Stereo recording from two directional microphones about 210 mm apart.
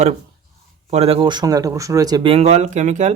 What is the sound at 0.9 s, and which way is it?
Speech, 30° right (ahead or behind).